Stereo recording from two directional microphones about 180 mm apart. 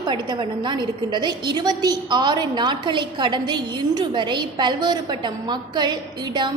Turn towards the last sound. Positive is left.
turn(degrees=-25)  # may be behind; listen again after turning